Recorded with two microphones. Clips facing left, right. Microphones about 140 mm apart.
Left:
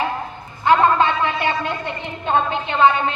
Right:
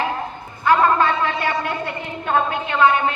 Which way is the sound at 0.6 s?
20° left (ahead or behind).